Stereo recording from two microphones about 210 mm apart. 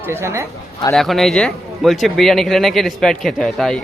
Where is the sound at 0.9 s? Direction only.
Centre (ahead or behind).